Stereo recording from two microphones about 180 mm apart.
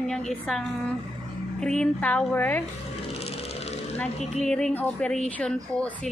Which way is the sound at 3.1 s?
35° left (ahead or behind).